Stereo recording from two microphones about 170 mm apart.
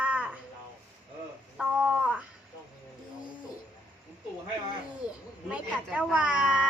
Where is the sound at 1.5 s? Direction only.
5° right (ahead or behind).